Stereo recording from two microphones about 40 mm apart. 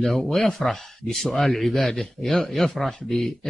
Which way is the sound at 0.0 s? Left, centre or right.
Centre.